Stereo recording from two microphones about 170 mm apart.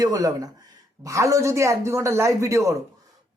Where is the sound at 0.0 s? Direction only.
20° right (ahead or behind).